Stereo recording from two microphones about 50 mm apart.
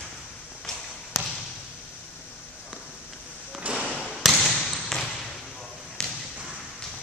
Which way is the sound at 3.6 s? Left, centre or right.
Right.